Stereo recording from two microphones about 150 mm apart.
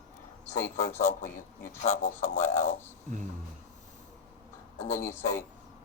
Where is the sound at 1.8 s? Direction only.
55° left (ahead or behind).